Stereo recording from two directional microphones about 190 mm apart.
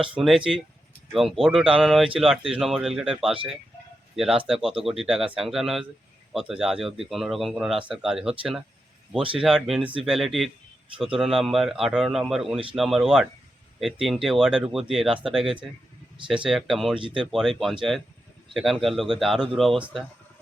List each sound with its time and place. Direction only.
0.1 s speech: 5° right (ahead or behind)
17.0 s speech: 25° right (ahead or behind)
17.3 s speech: centre (ahead or behind)